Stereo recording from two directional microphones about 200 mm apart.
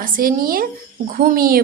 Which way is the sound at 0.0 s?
45° right (ahead or behind).